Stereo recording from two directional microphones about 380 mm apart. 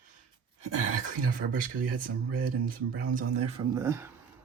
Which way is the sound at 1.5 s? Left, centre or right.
Right.